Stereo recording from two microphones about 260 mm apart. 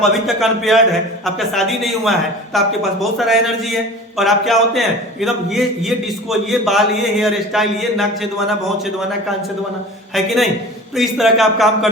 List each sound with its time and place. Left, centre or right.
0.1 s speech: centre
10.2 s speech: centre